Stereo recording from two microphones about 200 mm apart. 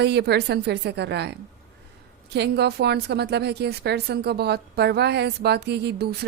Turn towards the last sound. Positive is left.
turn(degrees=-55)  # may be behind; listen again after turning